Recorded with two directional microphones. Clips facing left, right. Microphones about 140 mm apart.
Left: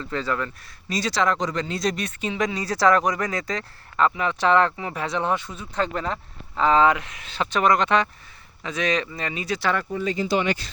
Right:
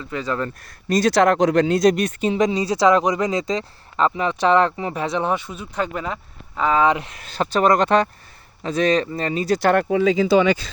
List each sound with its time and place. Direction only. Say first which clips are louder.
0.0 s speech: right 1 dB; 15° right (ahead or behind)
0.9 s speech: right 7 dB; 50° right (ahead or behind)
2.4 s speech: right 3 dB; 20° right (ahead or behind)
6.9 s speech: right 4 dB; 35° right (ahead or behind); by 9.8 s 50° right (ahead or behind)
9.9 s speech: right 9 dB; 90° right